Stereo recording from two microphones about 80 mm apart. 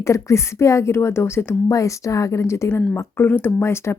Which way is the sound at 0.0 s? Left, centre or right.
Left.